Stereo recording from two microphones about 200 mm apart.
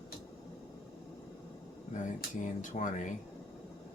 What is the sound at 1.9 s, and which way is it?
Speech, 40° left (ahead or behind).